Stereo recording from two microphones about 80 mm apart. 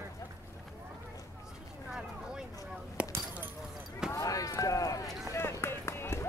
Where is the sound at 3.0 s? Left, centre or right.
Centre.